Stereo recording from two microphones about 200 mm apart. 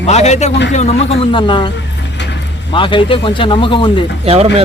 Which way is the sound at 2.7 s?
25° left (ahead or behind).